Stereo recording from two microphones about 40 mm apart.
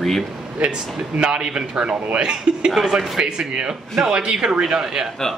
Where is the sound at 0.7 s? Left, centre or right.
Centre.